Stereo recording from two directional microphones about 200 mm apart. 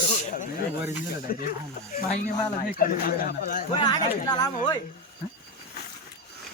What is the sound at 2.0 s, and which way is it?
Speech, 35° left (ahead or behind).